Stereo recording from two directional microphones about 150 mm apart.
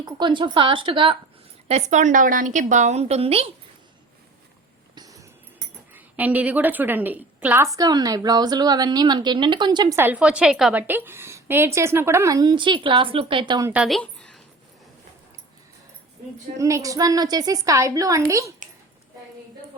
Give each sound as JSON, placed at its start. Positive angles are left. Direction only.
{"t": 0.0, "sound": "speech", "side_deg": -30}
{"t": 1.6, "sound": "a woman's voice", "side_deg": -50}
{"t": 4.9, "sound": "a sound", "side_deg": -20}
{"t": 5.9, "sound": "a woman's voice", "side_deg": -10}
{"t": 10.0, "sound": "a woman's voice", "side_deg": -10}
{"t": 13.8, "sound": "a sound", "side_deg": 5}
{"t": 16.6, "sound": "a woman's voice", "side_deg": -20}